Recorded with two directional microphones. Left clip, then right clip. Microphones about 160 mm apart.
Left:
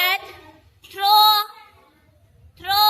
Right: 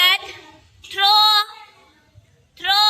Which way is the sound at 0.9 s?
10° left (ahead or behind).